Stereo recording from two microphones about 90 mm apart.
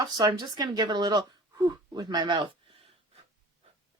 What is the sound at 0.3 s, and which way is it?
Speech, 45° right (ahead or behind).